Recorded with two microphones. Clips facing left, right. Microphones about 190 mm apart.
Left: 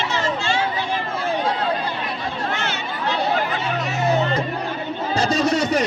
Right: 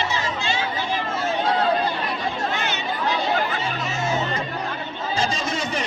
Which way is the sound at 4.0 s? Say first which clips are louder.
Left 5 dB; 60° left (ahead or behind).